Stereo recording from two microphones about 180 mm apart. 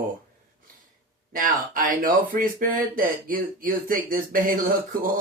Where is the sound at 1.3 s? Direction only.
50° right (ahead or behind).